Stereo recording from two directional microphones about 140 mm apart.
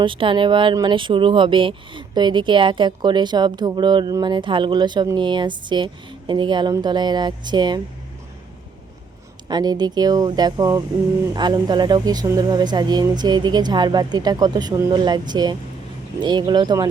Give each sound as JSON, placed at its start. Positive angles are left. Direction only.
{"t": 0.0, "sound": "speech", "side_deg": -35}
{"t": 9.5, "sound": "speech", "side_deg": -30}